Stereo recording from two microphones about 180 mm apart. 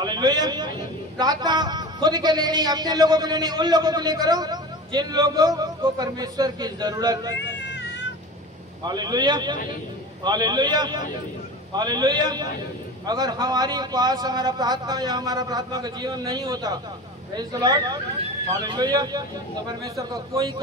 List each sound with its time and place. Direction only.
0.0 s a man's voice: 25° right (ahead or behind)
7.3 s cat: 80° left
8.8 s a man's voice: 25° right (ahead or behind)